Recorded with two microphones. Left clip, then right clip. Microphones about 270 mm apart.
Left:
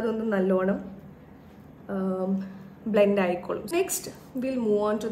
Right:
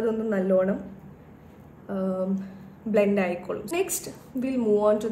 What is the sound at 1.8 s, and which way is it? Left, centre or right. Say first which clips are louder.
A woman's voice: right 1 dB; centre.